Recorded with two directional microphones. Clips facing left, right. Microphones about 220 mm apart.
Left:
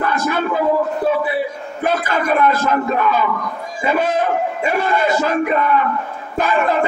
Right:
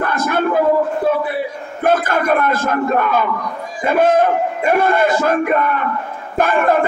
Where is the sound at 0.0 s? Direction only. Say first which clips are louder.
Right 1 dB; 50° right (ahead or behind).